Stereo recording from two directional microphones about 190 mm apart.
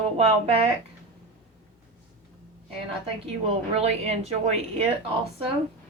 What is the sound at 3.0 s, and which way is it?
Speech, 30° right (ahead or behind).